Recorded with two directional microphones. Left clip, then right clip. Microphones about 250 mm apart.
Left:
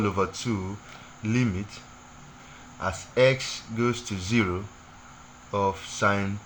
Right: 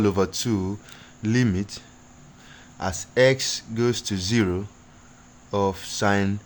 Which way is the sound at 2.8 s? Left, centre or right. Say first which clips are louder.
Right 2 dB; right.